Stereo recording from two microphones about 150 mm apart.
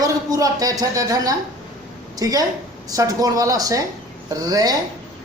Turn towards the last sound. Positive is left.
turn(degrees=-25)  # may be behind; listen again after turning